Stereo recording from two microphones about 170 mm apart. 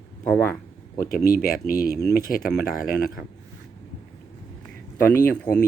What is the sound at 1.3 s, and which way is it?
Speech, 60° left (ahead or behind).